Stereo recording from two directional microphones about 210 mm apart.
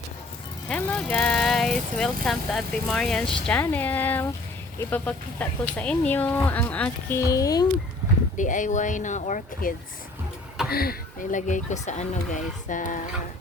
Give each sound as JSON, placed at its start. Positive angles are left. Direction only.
{"t": 0.7, "sound": "speech", "side_deg": 5}
{"t": 8.4, "sound": "speech", "side_deg": 35}